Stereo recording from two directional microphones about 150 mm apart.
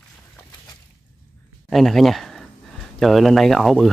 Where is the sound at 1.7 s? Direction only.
Centre (ahead or behind).